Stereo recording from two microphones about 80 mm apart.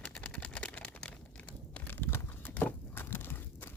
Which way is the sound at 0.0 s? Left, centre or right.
Centre.